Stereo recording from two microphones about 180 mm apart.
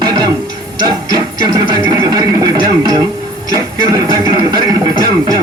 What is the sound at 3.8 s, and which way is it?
Music, 20° right (ahead or behind).